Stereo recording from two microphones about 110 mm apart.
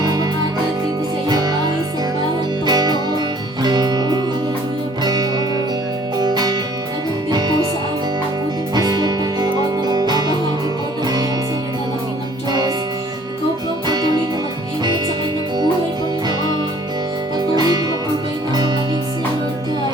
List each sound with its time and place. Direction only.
0.0 s music: 40° right (ahead or behind)
1.3 s music: 40° right (ahead or behind)
8.7 s music: 40° right (ahead or behind)
12.5 s music: 40° right (ahead or behind)
13.8 s music: 40° right (ahead or behind)
16.2 s music: 40° right (ahead or behind)